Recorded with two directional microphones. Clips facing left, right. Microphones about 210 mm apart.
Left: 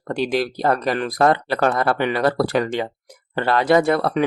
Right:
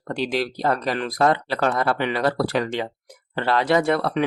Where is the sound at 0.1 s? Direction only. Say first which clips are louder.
Left 3 dB; 50° left (ahead or behind).